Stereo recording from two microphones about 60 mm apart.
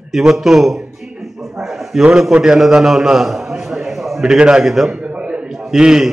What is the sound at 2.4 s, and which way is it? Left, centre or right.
A man's voice, centre.